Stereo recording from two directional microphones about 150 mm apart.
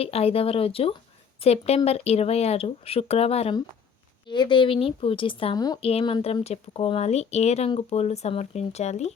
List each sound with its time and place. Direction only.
0.0 s a woman's voice: 40° left (ahead or behind)
4.3 s a woman's voice: 30° left (ahead or behind)
5.8 s speech: 40° left (ahead or behind)